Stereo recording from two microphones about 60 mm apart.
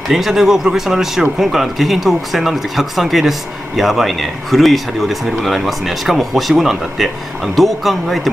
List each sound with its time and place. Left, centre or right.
0.1 s speech: centre